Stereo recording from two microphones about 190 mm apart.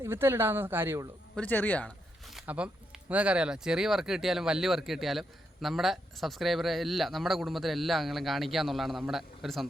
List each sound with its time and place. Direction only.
0.0 s speech: 15° right (ahead or behind)
1.4 s speech: 10° left (ahead or behind)